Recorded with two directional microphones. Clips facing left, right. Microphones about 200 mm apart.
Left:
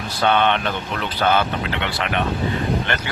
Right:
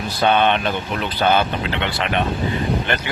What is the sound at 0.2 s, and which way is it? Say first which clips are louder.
Speech: right 1 dB; 15° right (ahead or behind).